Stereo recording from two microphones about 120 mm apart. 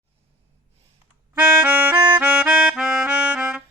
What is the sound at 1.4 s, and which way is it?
Music, 15° right (ahead or behind).